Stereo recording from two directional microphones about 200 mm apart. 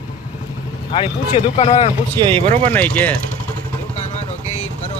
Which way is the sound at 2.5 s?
10° left (ahead or behind).